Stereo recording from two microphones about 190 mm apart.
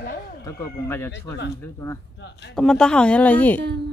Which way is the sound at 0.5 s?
15° left (ahead or behind).